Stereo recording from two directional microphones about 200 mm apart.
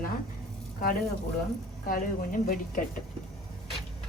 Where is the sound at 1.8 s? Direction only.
45° left (ahead or behind).